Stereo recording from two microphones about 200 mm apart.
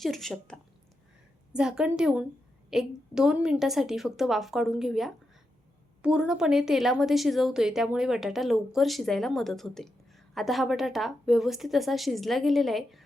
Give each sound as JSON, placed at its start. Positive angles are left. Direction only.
{"t": 0.0, "sound": "a woman's voice", "side_deg": 0}